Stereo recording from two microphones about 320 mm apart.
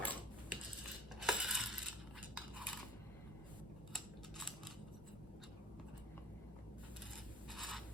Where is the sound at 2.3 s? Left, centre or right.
Centre.